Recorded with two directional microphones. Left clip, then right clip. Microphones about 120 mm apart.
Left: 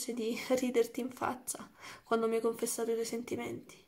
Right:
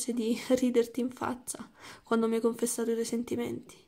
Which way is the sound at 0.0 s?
40° right (ahead or behind).